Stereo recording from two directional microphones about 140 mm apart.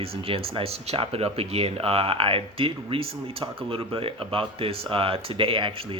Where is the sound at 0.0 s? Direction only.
40° right (ahead or behind).